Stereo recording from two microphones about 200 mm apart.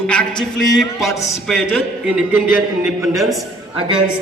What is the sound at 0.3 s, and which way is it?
Speech, 20° left (ahead or behind).